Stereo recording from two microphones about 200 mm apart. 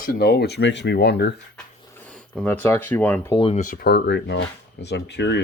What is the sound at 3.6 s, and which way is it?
Speech, 45° left (ahead or behind).